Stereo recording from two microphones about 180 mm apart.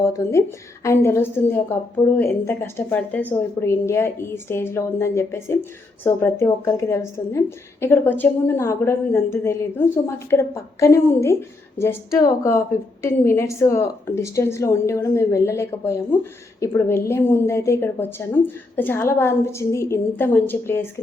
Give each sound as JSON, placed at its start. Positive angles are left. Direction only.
{"t": 0.0, "sound": "speech", "side_deg": 15}